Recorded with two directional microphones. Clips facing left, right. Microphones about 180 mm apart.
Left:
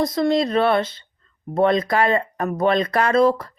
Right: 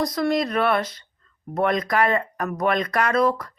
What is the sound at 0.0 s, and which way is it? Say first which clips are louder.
A woman's voice: left 3 dB; 25° left (ahead or behind).